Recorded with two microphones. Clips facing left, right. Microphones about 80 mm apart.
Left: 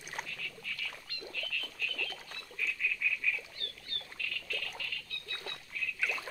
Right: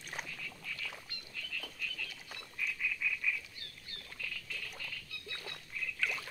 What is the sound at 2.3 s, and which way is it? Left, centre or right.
Bird, centre.